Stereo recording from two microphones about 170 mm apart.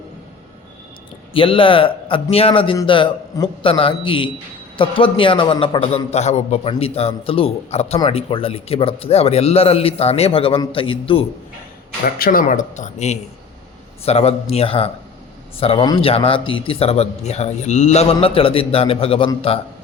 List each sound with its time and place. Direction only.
1.3 s a man's voice: 30° left (ahead or behind)
12.0 s a man's voice: 60° left (ahead or behind); by 19.3 s 35° left (ahead or behind)